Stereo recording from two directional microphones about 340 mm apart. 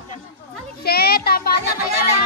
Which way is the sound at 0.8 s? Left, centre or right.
Left.